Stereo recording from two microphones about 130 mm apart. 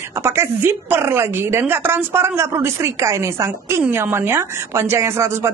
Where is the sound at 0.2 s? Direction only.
20° right (ahead or behind).